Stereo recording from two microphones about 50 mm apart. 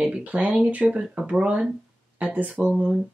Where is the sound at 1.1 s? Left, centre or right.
Right.